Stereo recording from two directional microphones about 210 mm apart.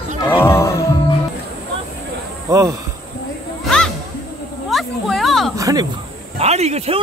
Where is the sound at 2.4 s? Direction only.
15° right (ahead or behind).